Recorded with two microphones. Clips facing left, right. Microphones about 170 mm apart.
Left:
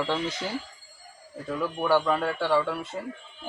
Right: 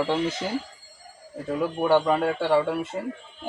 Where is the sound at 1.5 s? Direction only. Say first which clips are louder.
Right 3 dB; 25° right (ahead or behind).